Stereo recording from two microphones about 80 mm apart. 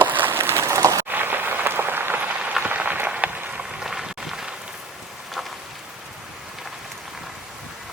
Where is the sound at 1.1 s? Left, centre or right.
Right; by 5.6 s centre.